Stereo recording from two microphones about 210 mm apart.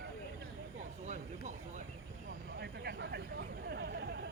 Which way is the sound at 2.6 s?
55° right (ahead or behind).